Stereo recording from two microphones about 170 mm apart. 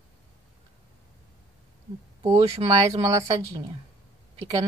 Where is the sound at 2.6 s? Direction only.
35° right (ahead or behind).